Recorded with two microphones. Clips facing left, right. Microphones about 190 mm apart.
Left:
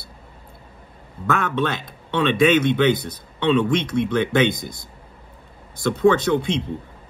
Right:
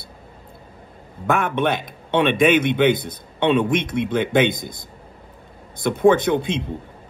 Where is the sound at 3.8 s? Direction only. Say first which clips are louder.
Left 1 dB; 20° right (ahead or behind).